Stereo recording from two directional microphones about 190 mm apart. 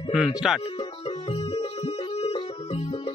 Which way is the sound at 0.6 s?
30° left (ahead or behind).